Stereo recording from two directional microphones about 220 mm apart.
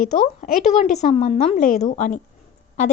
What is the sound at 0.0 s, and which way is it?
A woman's voice, 35° left (ahead or behind).